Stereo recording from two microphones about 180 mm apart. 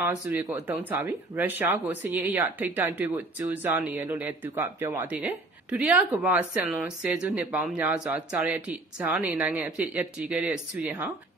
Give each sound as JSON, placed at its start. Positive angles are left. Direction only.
{"t": 0.0, "sound": "speech", "side_deg": -10}